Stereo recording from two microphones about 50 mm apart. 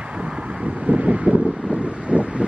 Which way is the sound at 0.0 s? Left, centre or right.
Right.